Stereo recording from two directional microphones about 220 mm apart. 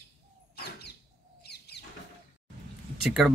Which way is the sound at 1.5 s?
50° left (ahead or behind).